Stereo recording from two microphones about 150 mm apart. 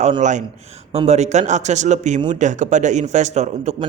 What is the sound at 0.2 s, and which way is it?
A man's voice, 55° right (ahead or behind).